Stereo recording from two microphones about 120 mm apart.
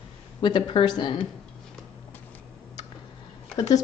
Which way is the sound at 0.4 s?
40° left (ahead or behind).